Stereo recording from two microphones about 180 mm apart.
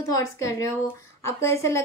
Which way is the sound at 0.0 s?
20° left (ahead or behind).